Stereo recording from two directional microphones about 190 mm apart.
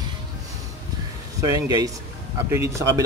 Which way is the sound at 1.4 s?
20° right (ahead or behind).